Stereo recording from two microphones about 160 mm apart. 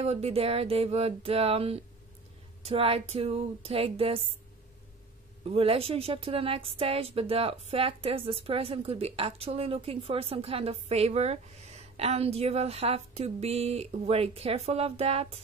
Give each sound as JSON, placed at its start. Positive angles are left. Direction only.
{"t": 0.0, "sound": "a woman's voice", "side_deg": -40}
{"t": 5.4, "sound": "a woman's voice", "side_deg": -35}